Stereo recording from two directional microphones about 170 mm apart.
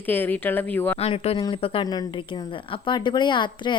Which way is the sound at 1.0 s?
35° left (ahead or behind).